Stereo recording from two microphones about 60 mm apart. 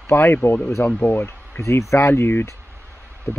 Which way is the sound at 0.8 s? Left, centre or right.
Left.